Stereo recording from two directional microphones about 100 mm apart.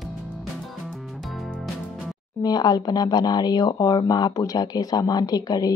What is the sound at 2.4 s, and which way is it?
Speech, 45° left (ahead or behind).